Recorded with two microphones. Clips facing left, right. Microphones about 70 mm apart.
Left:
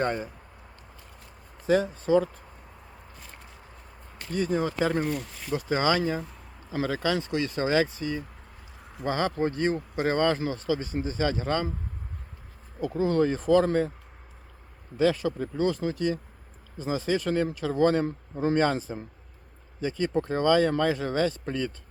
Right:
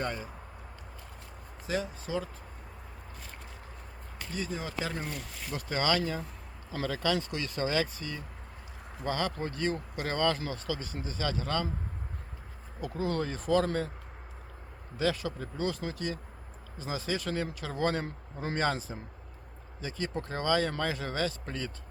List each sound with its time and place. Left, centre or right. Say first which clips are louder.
0.0 s speech: left 7 dB; left
1.6 s speech: left 10 dB; left
4.3 s speech: left 10 dB; left
5.1 s speech: left 8 dB; left
12.8 s speech: left 8 dB; left
14.9 s speech: left 7 dB; left